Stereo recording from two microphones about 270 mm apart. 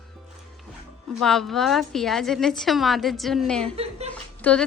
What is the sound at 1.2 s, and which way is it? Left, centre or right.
A woman's voice, centre.